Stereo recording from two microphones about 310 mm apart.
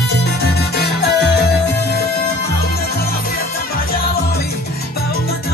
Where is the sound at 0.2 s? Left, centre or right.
Left.